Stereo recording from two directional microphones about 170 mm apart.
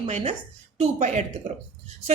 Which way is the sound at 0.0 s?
45° right (ahead or behind).